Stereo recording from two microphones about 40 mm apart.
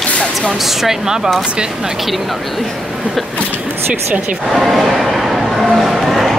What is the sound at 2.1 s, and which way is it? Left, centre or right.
Speech, centre.